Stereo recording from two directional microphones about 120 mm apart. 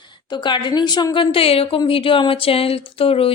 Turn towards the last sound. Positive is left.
turn(degrees=50)  # may be behind; listen again after turning